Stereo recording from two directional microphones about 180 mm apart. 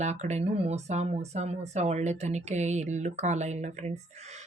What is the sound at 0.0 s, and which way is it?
A woman's voice, 40° right (ahead or behind).